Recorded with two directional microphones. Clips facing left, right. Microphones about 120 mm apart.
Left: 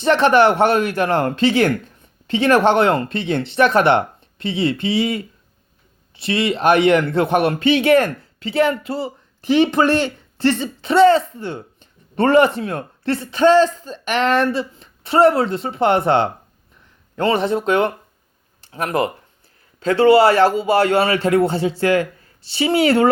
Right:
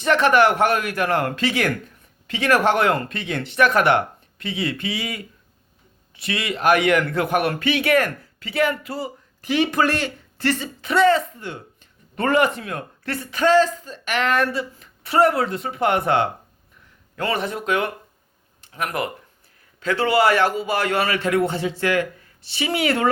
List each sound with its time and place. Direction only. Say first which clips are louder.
0.0 s a man's voice: left 3 dB; 30° left (ahead or behind)